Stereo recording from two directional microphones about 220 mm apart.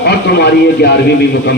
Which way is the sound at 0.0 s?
45° left (ahead or behind).